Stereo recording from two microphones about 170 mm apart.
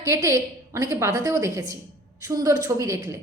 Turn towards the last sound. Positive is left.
turn(degrees=-20)  # may be behind; listen again after turning